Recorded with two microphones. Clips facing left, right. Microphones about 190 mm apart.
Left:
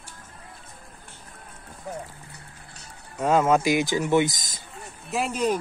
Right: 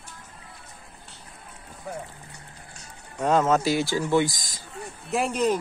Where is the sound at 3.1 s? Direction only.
10° left (ahead or behind).